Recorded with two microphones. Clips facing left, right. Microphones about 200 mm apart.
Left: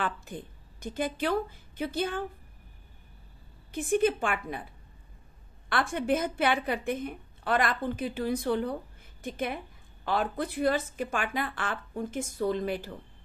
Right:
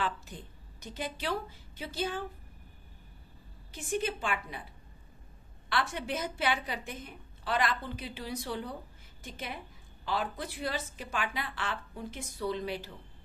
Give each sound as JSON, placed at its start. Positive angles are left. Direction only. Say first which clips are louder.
{"t": 0.0, "sound": "a woman's voice", "louder": "left 2 dB", "side_deg": 55}
{"t": 3.7, "sound": "a woman's voice", "louder": "left 8 dB", "side_deg": 55}
{"t": 5.7, "sound": "a woman's voice", "louder": "left 6 dB", "side_deg": 50}